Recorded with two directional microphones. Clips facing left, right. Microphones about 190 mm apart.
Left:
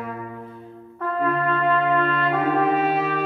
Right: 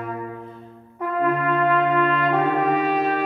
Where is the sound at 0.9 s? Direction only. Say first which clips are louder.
Right 1 dB; 15° right (ahead or behind).